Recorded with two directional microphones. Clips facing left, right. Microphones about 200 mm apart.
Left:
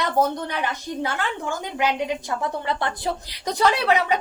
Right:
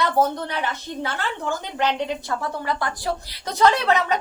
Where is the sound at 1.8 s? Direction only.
10° left (ahead or behind).